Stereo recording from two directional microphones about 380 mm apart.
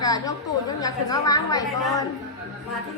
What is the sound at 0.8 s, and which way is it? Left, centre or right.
A woman's voice, centre.